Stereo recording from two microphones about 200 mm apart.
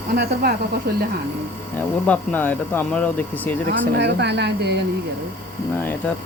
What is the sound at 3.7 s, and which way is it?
Speech, 55° right (ahead or behind).